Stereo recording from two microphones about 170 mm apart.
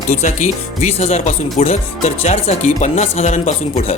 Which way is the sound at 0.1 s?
45° left (ahead or behind).